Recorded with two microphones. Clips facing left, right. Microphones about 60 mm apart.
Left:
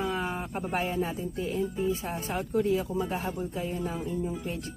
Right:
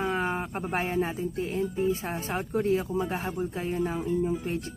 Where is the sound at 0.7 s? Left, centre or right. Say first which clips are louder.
Right 2 dB; right.